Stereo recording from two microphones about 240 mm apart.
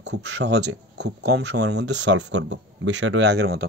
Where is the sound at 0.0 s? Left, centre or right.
Right.